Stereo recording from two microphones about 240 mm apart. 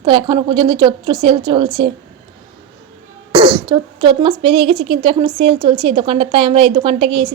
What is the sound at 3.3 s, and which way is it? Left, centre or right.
Speech, right.